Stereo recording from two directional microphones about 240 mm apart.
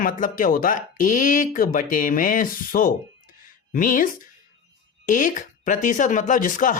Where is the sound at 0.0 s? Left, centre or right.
Left.